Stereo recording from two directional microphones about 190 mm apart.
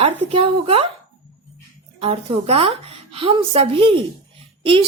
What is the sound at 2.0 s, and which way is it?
A woman's voice, 30° right (ahead or behind).